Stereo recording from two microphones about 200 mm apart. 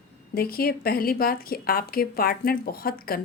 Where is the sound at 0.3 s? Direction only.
50° left (ahead or behind).